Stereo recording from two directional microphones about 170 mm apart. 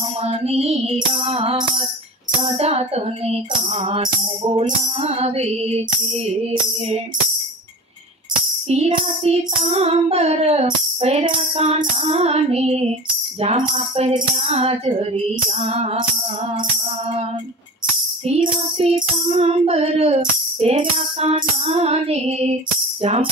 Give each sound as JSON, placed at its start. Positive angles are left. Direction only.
{"t": 0.2, "sound": "music", "side_deg": -35}
{"t": 1.2, "sound": "child singing", "side_deg": -35}
{"t": 8.6, "sound": "child singing", "side_deg": -40}
{"t": 18.2, "sound": "child singing", "side_deg": -35}